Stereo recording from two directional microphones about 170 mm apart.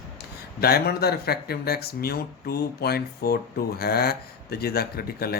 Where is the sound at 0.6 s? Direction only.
65° left (ahead or behind).